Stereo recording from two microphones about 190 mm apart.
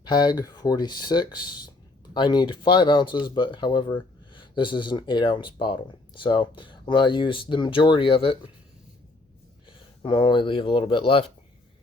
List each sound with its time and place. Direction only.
0.0 s speech: 20° left (ahead or behind)
9.6 s speech: 25° left (ahead or behind)